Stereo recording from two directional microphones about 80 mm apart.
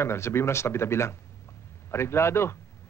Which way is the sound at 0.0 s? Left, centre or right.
Left.